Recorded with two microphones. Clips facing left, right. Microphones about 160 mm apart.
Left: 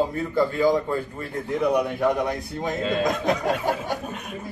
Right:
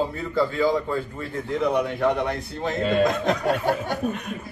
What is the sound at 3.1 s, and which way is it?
Speech, 10° left (ahead or behind).